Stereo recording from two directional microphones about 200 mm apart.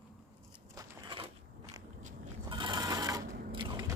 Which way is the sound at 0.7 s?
20° right (ahead or behind).